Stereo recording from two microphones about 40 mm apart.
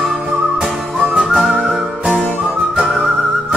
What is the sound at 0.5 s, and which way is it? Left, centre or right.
Whistling, right.